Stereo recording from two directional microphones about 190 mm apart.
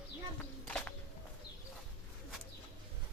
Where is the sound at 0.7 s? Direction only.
5° left (ahead or behind).